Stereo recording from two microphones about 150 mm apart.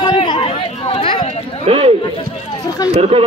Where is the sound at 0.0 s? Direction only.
30° left (ahead or behind).